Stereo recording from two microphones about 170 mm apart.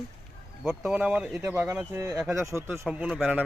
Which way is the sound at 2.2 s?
Centre (ahead or behind).